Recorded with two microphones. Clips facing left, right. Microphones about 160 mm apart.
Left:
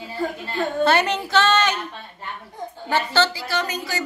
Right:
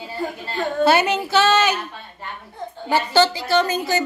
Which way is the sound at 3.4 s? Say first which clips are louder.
Right 7 dB; 25° right (ahead or behind).